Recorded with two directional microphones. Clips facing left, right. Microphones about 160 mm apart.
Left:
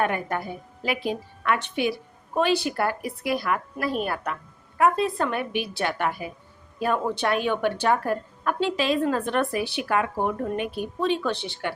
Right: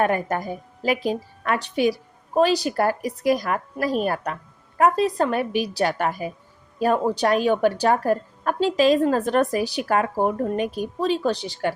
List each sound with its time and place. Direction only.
0.0 s speech: 40° right (ahead or behind)